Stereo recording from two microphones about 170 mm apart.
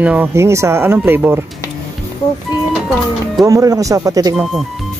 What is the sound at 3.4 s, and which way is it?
Speech, 20° right (ahead or behind).